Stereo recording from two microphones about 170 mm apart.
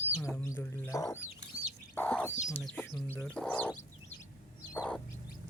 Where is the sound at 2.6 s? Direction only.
5° left (ahead or behind).